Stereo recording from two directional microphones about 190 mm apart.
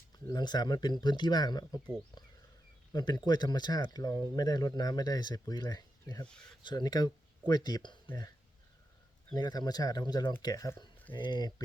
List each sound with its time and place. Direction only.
0.3 s speech: 20° left (ahead or behind)
2.9 s speech: 20° left (ahead or behind)
9.3 s speech: 20° left (ahead or behind)